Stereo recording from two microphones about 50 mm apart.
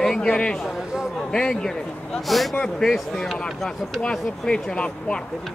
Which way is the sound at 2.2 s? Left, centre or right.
Centre.